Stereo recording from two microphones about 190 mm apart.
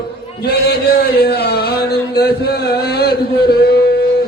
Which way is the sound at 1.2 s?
55° left (ahead or behind).